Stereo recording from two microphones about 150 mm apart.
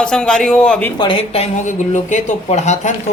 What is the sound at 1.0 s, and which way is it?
A woman's voice, 35° left (ahead or behind).